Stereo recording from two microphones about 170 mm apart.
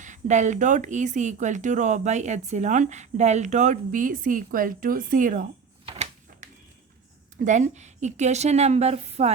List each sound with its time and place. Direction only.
0.0 s speech: 45° right (ahead or behind)
5.8 s typewriter: 35° right (ahead or behind)
6.3 s a sound: 55° right (ahead or behind)
7.3 s a woman's voice: 45° right (ahead or behind)